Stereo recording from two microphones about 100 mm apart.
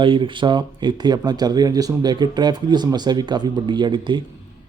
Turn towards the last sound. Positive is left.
turn(degrees=-50)  # may be behind; listen again after turning